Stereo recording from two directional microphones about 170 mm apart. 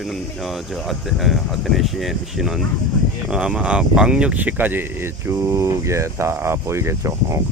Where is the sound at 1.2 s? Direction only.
Centre (ahead or behind).